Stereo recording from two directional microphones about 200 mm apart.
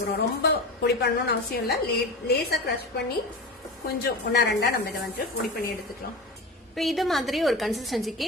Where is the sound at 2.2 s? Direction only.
50° left (ahead or behind).